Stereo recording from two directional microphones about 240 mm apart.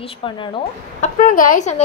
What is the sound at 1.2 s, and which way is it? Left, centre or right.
Speech, left.